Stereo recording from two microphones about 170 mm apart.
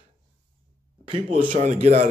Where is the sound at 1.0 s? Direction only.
30° right (ahead or behind).